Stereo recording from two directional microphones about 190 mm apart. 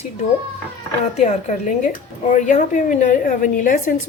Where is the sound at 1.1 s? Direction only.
35° left (ahead or behind).